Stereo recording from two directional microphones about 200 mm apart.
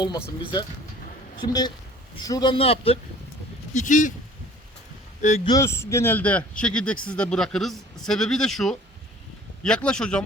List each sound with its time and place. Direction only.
0.0 s speech: 15° left (ahead or behind)
1.4 s speech: 20° left (ahead or behind); by 4.1 s 40° left (ahead or behind)
5.5 s speech: 15° left (ahead or behind)